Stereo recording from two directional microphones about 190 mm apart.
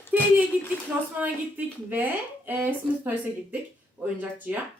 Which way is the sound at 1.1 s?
10° right (ahead or behind).